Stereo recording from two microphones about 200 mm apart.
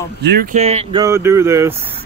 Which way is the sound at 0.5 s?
30° right (ahead or behind).